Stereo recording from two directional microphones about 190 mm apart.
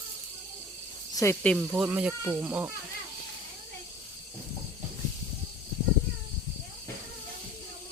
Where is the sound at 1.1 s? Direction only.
15° left (ahead or behind).